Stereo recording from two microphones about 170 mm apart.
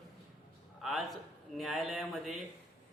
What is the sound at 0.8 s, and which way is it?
A man's voice, centre (ahead or behind).